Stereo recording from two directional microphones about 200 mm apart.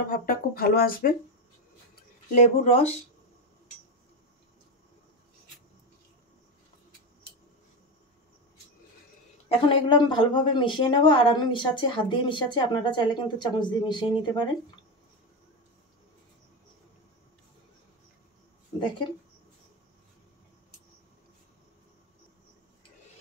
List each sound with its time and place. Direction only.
0.1 s speech: 45° left (ahead or behind)
2.3 s speech: 35° left (ahead or behind)
9.5 s speech: 25° left (ahead or behind)